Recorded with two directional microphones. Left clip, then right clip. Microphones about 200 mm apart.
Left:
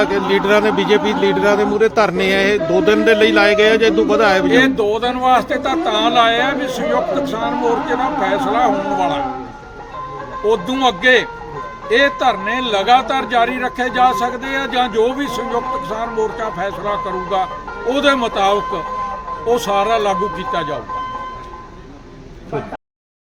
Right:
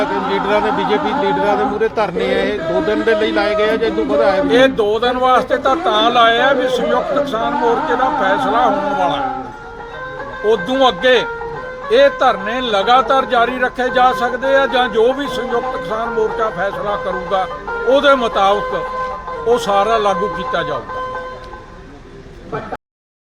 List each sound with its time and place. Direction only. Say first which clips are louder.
0.0 s speech: left 2 dB; 60° left (ahead or behind)
4.5 s speech: right 2 dB; 5° right (ahead or behind)
10.5 s speech: right 3 dB; 5° right (ahead or behind)